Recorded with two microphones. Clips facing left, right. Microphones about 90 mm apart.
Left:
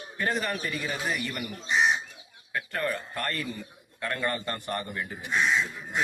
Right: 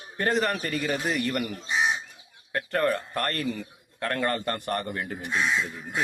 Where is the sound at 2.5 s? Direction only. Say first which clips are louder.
Right 5 dB; 50° right (ahead or behind).